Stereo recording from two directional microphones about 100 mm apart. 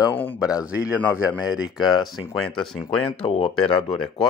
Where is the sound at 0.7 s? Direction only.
10° right (ahead or behind); by 2.8 s 5° left (ahead or behind).